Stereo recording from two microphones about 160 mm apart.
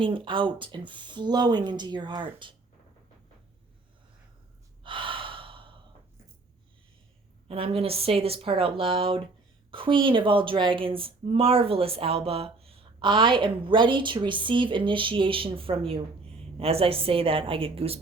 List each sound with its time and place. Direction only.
0.0 s speech: 30° right (ahead or behind)
4.8 s gasp: 30° right (ahead or behind)
7.4 s speech: 35° right (ahead or behind)